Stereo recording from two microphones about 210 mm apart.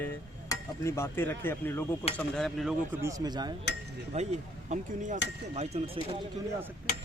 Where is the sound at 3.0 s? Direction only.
15° right (ahead or behind).